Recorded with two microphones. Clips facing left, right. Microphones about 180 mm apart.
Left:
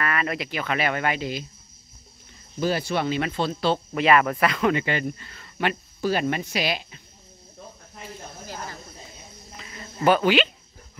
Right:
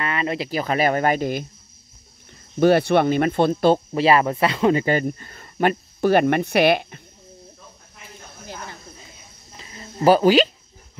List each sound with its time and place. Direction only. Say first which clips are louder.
0.0 s speech: right 2 dB; 25° right (ahead or behind); by 1.5 s 50° right (ahead or behind)
2.6 s speech: right 9 dB; 60° right (ahead or behind)
3.9 s speech: right 2 dB; 30° right (ahead or behind); by 7.0 s 60° right (ahead or behind)
9.6 s insect: right 3 dB; 30° right (ahead or behind)